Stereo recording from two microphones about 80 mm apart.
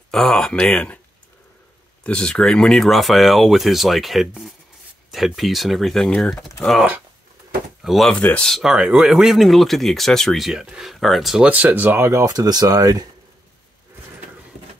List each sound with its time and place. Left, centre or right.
0.1 s speech: centre
2.0 s speech: centre
8.1 s speech: centre
8.5 s speech: centre
8.7 s speech: centre
11.4 s speech: centre
12.1 s speech: right
12.4 s speech: right